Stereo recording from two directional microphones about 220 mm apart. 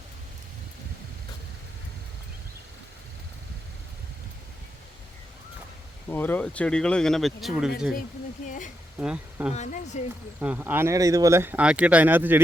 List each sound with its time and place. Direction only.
6.1 s speech: 10° left (ahead or behind)
8.4 s speech: 35° left (ahead or behind)
9.0 s speech: 5° right (ahead or behind)
9.6 s speech: 30° left (ahead or behind)
10.4 s speech: 10° right (ahead or behind)